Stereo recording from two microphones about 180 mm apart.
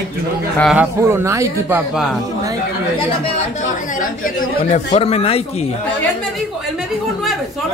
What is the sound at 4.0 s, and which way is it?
Speech, 45° left (ahead or behind).